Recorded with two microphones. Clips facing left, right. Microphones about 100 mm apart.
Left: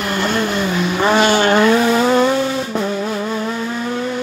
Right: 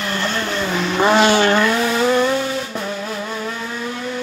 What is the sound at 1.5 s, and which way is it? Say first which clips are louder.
Vehicle: left 4 dB; 20° left (ahead or behind).